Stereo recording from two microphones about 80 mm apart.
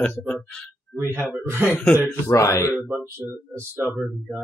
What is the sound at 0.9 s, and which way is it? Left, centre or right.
Speech, right.